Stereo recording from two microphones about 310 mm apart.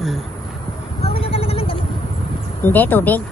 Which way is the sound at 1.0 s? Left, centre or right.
Centre.